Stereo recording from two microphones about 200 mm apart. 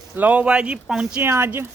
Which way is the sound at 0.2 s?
5° right (ahead or behind).